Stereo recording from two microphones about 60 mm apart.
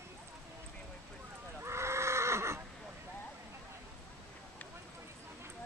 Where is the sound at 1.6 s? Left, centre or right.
Right.